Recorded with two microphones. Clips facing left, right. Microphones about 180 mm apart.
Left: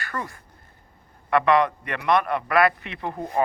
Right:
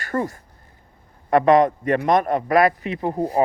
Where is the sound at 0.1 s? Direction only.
40° right (ahead or behind).